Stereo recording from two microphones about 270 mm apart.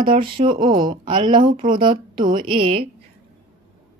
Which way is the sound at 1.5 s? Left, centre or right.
Right.